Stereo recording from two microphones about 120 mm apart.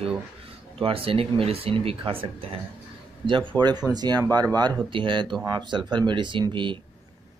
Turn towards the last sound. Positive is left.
turn(degrees=-40)  # may be behind; listen again after turning